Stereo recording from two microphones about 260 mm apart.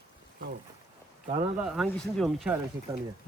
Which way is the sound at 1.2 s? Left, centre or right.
Right.